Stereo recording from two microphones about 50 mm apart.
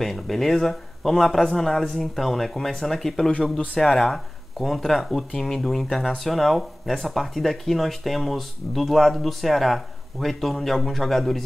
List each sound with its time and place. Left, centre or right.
0.0 s speech: centre
3.4 s speech: centre
3.8 s speech: centre